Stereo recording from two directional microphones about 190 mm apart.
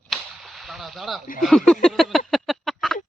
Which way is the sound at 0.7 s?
Centre (ahead or behind).